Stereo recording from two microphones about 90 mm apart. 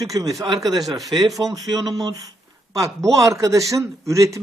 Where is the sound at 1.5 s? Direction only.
45° right (ahead or behind).